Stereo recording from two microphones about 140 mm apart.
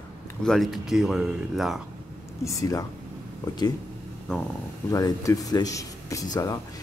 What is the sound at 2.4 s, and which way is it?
Speech, 25° left (ahead or behind).